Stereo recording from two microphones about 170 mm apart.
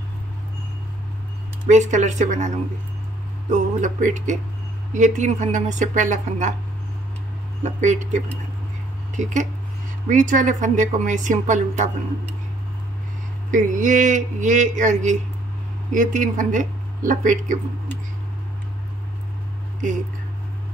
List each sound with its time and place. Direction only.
1.7 s a woman's voice: 45° right (ahead or behind)
7.6 s a woman's voice: 45° right (ahead or behind)
13.5 s a woman's voice: 50° right (ahead or behind)